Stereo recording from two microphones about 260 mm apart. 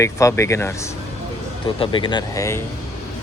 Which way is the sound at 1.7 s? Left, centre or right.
Centre.